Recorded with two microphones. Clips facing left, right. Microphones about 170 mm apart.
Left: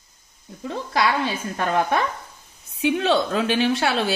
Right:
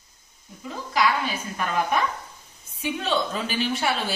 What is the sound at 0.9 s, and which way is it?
A woman's voice, 65° left (ahead or behind).